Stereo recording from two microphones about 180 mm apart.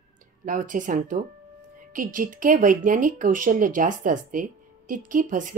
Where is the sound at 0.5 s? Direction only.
45° right (ahead or behind).